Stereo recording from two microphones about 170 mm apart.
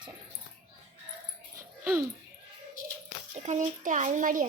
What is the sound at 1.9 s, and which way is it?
Speech, 10° right (ahead or behind).